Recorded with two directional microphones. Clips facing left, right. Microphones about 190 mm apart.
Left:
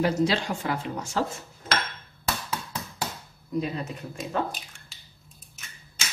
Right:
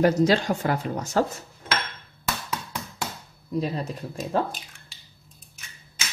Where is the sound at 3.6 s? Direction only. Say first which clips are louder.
Right 3 dB; 35° right (ahead or behind).